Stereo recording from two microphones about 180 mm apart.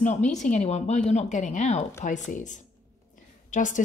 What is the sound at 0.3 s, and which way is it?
A woman's voice, 40° left (ahead or behind).